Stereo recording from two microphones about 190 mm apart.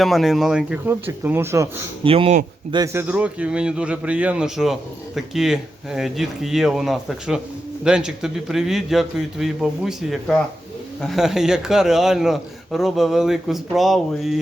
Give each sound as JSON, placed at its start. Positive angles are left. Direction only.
{"t": 0.0, "sound": "speech", "side_deg": 0}
{"t": 2.0, "sound": "speech", "side_deg": -30}
{"t": 2.8, "sound": "speech", "side_deg": -10}